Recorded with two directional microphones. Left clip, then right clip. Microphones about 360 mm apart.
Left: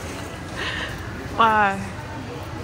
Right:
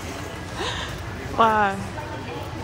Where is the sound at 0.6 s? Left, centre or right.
Centre.